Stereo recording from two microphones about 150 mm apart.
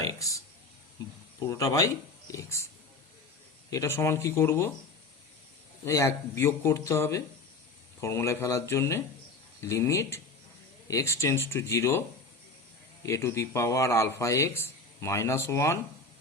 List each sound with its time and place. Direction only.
0.0 s a sound: 20° left (ahead or behind)
1.4 s speech: 20° left (ahead or behind)
3.7 s speech: 20° left (ahead or behind)
5.8 s a man's voice: 20° left (ahead or behind)